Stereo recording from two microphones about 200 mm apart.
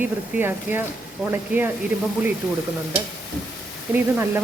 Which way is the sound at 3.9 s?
10° right (ahead or behind).